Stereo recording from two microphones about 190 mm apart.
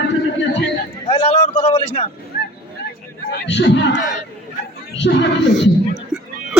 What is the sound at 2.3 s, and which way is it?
Honk, 55° left (ahead or behind).